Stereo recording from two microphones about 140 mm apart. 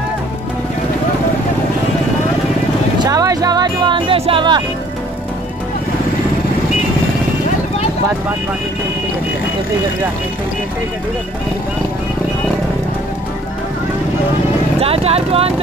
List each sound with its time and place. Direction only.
3.0 s music: 25° right (ahead or behind)
14.8 s speech: 45° right (ahead or behind)